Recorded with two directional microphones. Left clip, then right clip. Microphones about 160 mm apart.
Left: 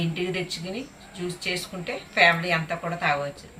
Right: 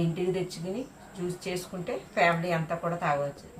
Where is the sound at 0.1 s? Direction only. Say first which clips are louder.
Left 2 dB; 15° right (ahead or behind).